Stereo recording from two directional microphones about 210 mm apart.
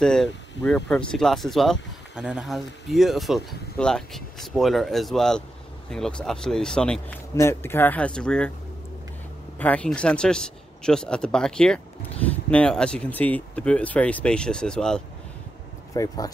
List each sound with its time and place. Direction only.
0.0 s speech: 5° left (ahead or behind)
9.6 s speech: 5° left (ahead or behind)
15.9 s speech: 15° left (ahead or behind)